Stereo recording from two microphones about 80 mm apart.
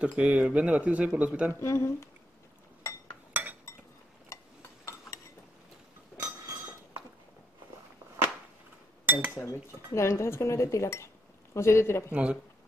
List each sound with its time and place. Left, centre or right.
0.0 s speech: centre
1.5 s cutlery: left
3.3 s cutlery: centre
4.3 s a sound: left
9.0 s cutlery: right
9.3 s cutlery: left
12.1 s speech: centre